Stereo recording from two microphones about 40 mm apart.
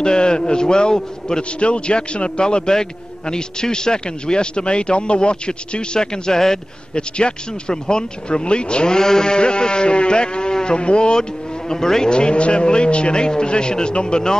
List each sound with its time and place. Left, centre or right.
0.0 s a man's voice: left